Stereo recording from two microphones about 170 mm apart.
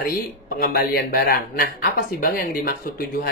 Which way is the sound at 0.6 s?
60° left (ahead or behind).